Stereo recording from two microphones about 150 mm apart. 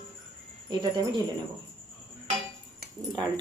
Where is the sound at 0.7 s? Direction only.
30° right (ahead or behind).